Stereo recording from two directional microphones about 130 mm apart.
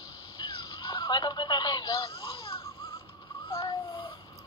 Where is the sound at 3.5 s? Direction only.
30° left (ahead or behind).